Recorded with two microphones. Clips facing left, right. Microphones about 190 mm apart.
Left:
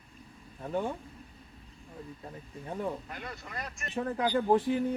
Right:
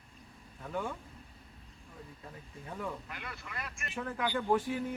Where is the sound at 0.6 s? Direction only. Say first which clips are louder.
Left 5 dB; 35° left (ahead or behind).